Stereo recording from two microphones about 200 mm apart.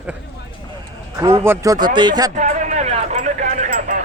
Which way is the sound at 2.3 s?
35° right (ahead or behind).